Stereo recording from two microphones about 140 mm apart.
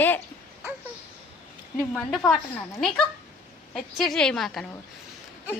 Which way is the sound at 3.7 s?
5° left (ahead or behind).